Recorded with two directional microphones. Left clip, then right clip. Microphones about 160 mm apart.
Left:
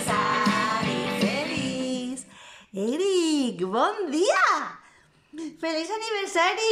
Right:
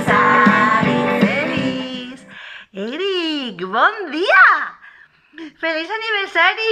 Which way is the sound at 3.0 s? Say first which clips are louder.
Right 3 dB; 45° left (ahead or behind).